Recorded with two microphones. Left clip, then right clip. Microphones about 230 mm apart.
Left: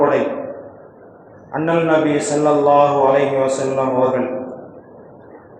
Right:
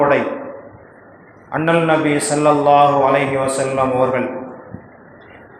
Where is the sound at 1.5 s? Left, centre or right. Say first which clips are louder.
Right 1 dB; right.